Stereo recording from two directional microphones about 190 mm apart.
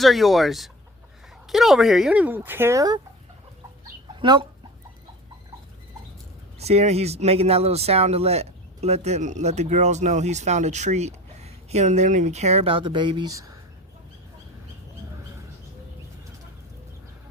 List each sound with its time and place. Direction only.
0.0 s speech: centre (ahead or behind); by 3.0 s 20° right (ahead or behind)
4.2 s speech: 25° right (ahead or behind)
6.6 s speech: 35° right (ahead or behind); by 13.5 s 20° right (ahead or behind)